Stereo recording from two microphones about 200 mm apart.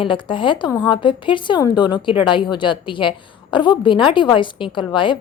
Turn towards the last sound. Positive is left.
turn(degrees=25)  # may be behind; listen again after turning